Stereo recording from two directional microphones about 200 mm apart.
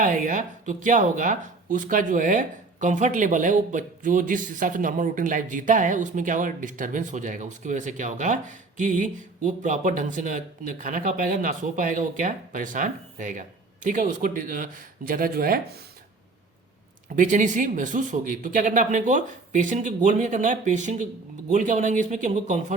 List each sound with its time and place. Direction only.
0.0 s speech: 40° right (ahead or behind)
17.2 s speech: 40° right (ahead or behind)